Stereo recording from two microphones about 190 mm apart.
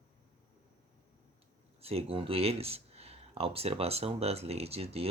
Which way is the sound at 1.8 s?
30° right (ahead or behind).